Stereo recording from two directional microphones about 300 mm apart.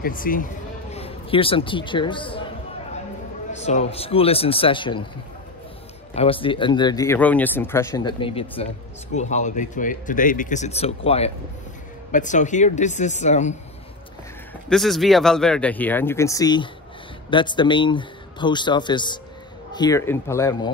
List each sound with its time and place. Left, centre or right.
0.0 s speech: left
3.5 s speech: left
6.1 s speech: centre
14.7 s speech: centre